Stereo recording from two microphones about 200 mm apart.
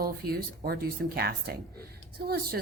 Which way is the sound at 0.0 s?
50° right (ahead or behind).